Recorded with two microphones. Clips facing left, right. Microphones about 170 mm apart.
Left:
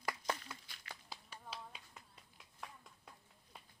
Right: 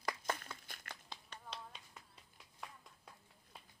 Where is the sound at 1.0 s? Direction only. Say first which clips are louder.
Left 1 dB; 5° left (ahead or behind).